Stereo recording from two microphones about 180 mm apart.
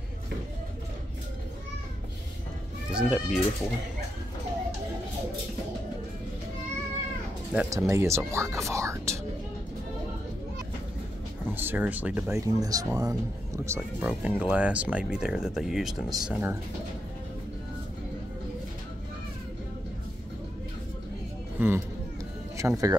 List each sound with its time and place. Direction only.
2.9 s speech: 5° right (ahead or behind)
7.5 s speech: 15° right (ahead or behind)
11.5 s speech: 10° right (ahead or behind)
13.7 s speech: 10° right (ahead or behind)
21.5 s speech: 15° right (ahead or behind)